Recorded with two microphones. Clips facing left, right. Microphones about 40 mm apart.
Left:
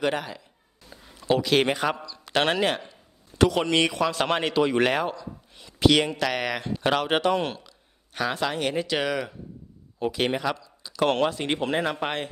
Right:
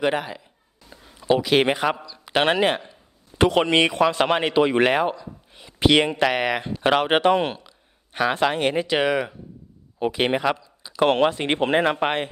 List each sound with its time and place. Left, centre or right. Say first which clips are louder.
0.0 s speech: right 3 dB; centre
0.9 s a sound: right 1 dB; centre
1.3 s a man's voice: right 3 dB; centre
4.3 s speech: right 4 dB; centre